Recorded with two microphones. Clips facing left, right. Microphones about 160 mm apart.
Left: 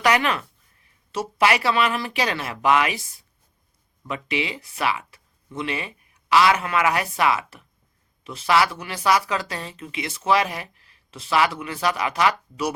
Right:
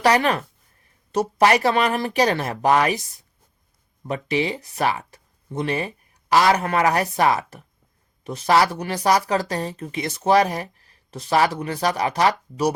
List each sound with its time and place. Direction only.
0.0 s speech: 35° right (ahead or behind)